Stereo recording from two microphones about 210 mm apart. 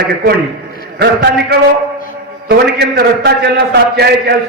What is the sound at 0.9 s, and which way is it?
A man's voice, 50° right (ahead or behind).